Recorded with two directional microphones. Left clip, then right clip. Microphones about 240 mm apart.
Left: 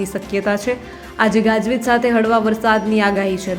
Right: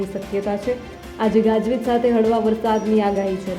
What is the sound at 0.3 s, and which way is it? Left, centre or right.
A woman's voice, centre.